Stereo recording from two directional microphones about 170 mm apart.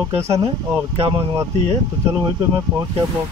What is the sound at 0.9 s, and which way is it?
Speech, 30° right (ahead or behind).